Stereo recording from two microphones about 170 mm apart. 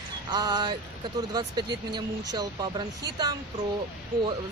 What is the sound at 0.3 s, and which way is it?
Speech, 25° right (ahead or behind).